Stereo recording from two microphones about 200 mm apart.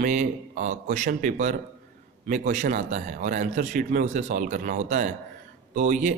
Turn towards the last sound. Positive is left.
turn(degrees=-40)  # may be behind; listen again after turning